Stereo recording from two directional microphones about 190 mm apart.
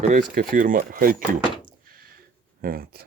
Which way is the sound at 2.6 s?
50° right (ahead or behind).